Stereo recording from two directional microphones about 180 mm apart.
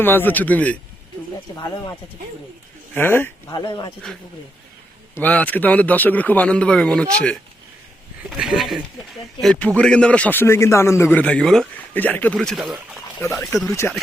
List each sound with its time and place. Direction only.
0.0 s a man's voice: 10° left (ahead or behind)
1.7 s a man's voice: 20° left (ahead or behind)
3.5 s speech: 25° left (ahead or behind)
5.1 s a man's voice: 10° left (ahead or behind)
13.3 s a man's voice: 15° left (ahead or behind)